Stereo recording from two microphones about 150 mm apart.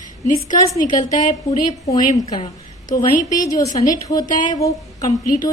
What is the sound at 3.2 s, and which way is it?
Speech, 60° left (ahead or behind).